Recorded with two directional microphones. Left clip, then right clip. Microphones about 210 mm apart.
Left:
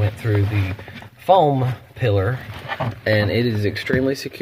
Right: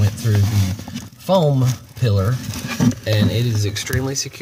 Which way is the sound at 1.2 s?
45° left (ahead or behind).